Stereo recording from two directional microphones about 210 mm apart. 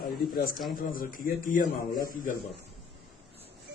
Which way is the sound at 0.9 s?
40° left (ahead or behind).